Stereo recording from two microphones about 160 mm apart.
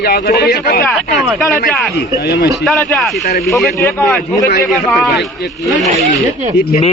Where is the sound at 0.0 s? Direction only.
80° left.